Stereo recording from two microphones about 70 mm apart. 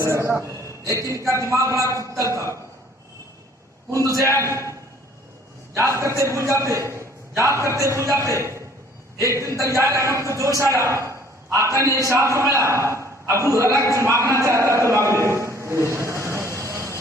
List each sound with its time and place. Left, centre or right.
0.0 s a man's voice: right
3.9 s a man's voice: right
5.7 s a man's voice: right